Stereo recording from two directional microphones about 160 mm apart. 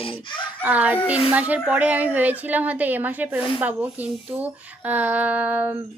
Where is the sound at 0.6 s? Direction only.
10° right (ahead or behind).